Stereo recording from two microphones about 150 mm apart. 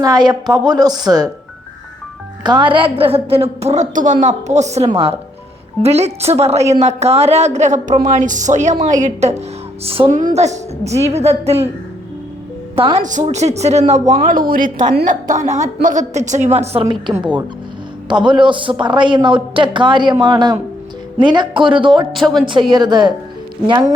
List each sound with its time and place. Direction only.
0.0 s a woman's voice: 25° right (ahead or behind)
2.4 s a woman's voice: 30° right (ahead or behind); by 9.4 s 50° right (ahead or behind)
9.8 s a man's voice: 40° right (ahead or behind)
10.1 s a woman's voice: 55° right (ahead or behind)
13.0 s a woman's voice: 55° right (ahead or behind)
14.1 s a woman's voice: 60° right (ahead or behind)
18.1 s a man's voice: 30° right (ahead or behind)
22.1 s speech: centre (ahead or behind)
22.7 s a woman's voice: 30° right (ahead or behind)